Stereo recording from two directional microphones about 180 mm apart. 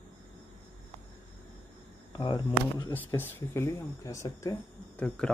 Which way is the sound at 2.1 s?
25° left (ahead or behind).